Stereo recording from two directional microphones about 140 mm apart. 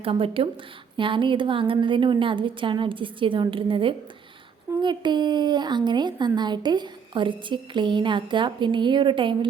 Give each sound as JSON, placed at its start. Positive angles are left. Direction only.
{"t": 0.0, "sound": "a woman's voice", "side_deg": -40}